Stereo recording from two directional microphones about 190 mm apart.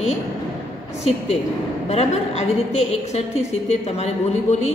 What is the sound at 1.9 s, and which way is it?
A woman's voice, 35° left (ahead or behind).